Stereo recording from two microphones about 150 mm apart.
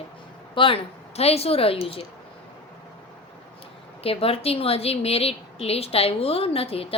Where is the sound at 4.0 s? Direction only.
40° left (ahead or behind).